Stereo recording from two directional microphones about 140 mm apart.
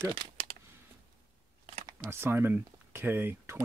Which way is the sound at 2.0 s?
15° right (ahead or behind).